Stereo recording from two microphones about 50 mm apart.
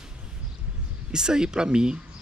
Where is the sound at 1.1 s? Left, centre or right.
Centre.